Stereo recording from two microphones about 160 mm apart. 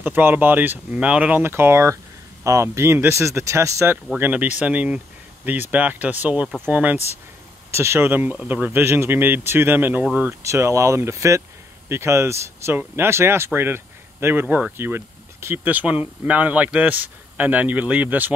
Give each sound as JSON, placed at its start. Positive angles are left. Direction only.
{"t": 0.0, "sound": "speech", "side_deg": -15}